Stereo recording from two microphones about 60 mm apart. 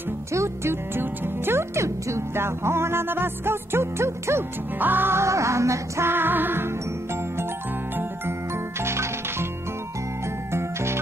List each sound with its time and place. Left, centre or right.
0.3 s speech: right
0.9 s music: right
4.7 s music: right
5.2 s music: right
6.0 s music: right
8.8 s music: right
10.5 s music: right